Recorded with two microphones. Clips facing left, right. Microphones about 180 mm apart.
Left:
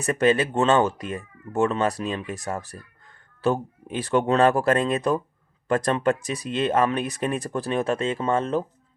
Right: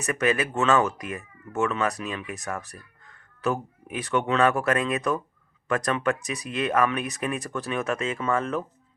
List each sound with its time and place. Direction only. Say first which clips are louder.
0.0 s speech: left 4 dB; 30° left (ahead or behind)